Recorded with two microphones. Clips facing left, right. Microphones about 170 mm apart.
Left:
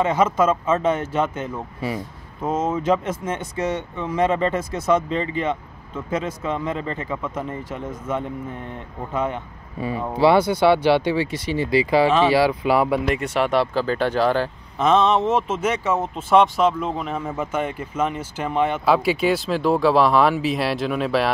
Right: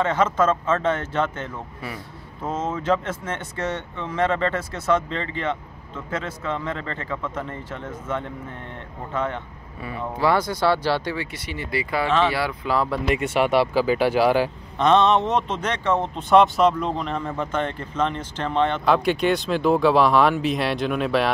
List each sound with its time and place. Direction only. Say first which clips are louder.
0.0 s speech: left 2 dB; 15° left (ahead or behind)
11.1 s speech: left 7 dB; 30° left (ahead or behind)
11.9 s speech: left 4 dB; 15° left (ahead or behind)
13.0 s speech: even; 5° right (ahead or behind)
14.8 s speech: even; centre (ahead or behind)